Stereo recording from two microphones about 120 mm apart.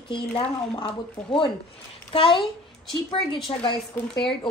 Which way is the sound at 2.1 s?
45° left (ahead or behind).